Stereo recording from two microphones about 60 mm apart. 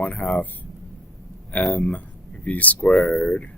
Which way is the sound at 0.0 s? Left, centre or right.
Left.